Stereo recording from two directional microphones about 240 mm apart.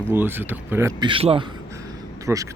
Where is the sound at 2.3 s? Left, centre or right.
Centre.